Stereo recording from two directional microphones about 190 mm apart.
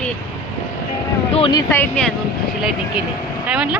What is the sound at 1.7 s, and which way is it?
Speech, 5° left (ahead or behind).